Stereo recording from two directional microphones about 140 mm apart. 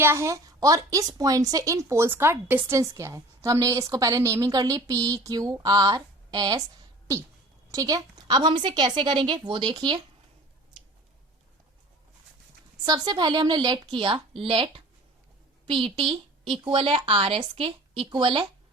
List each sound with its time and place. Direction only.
0.0 s a woman's voice: 20° right (ahead or behind)
7.7 s a woman's voice: 25° right (ahead or behind)
12.8 s a woman's voice: 30° right (ahead or behind)